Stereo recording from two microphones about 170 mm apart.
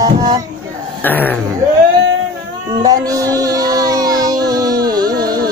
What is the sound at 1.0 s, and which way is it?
Speech, 10° left (ahead or behind).